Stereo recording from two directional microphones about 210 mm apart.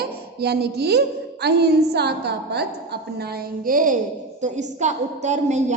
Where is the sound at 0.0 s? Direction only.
50° right (ahead or behind).